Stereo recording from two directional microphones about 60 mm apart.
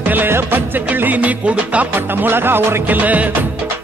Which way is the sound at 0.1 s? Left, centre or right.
Right.